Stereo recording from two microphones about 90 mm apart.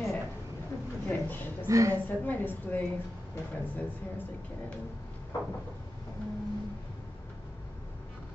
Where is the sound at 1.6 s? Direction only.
35° right (ahead or behind).